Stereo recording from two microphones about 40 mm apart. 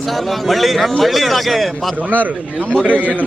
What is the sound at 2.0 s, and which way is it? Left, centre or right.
A man's voice, right.